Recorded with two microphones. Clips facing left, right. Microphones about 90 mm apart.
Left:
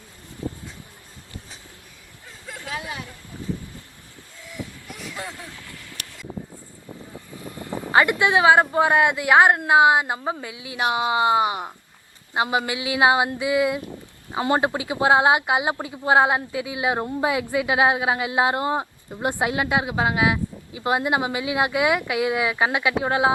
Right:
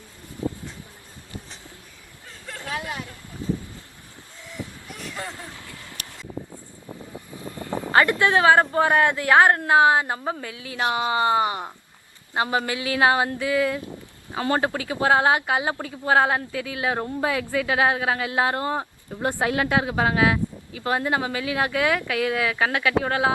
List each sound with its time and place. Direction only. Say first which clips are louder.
2.6 s speech: right 1 dB; 5° left (ahead or behind)
4.9 s a sound: even; 5° left (ahead or behind)
6.8 s vehicle: right 1 dB; 20° right (ahead or behind)
7.4 s vehicle: right 1 dB; 20° left (ahead or behind)
7.9 s a woman's voice: even; 15° left (ahead or behind)